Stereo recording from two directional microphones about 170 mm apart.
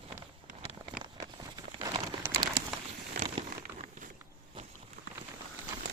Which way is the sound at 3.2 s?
40° right (ahead or behind).